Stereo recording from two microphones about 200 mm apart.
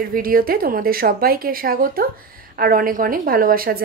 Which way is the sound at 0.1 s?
45° right (ahead or behind).